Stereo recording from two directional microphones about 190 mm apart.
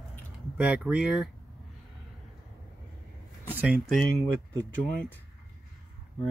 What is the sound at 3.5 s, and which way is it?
Speech, 5° right (ahead or behind).